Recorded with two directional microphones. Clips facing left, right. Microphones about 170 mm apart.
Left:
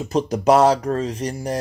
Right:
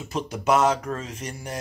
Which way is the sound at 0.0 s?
40° left (ahead or behind).